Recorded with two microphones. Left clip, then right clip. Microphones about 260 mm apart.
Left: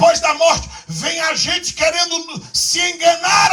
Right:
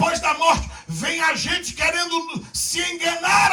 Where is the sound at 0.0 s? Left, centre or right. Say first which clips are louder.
Left 7 dB; left.